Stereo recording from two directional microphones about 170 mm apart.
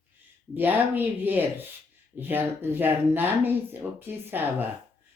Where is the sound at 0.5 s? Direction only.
10° right (ahead or behind).